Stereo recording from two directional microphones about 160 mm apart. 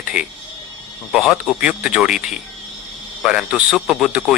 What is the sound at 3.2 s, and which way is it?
A man's voice, 5° right (ahead or behind).